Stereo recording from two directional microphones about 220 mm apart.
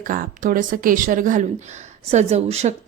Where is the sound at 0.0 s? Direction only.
40° right (ahead or behind).